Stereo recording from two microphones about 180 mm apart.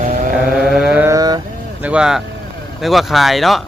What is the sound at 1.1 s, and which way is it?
Speech, 20° right (ahead or behind).